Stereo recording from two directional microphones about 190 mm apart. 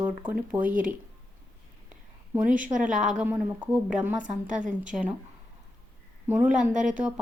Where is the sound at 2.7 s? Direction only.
45° right (ahead or behind).